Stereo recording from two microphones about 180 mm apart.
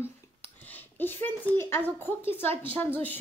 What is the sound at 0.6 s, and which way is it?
Speech, 10° left (ahead or behind).